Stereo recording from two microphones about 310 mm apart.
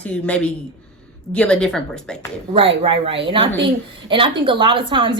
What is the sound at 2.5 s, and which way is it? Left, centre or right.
A woman's voice, centre.